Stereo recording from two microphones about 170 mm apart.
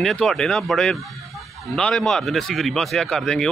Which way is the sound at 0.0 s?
Centre (ahead or behind).